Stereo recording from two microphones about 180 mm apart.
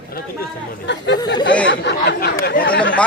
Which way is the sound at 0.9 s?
80° left.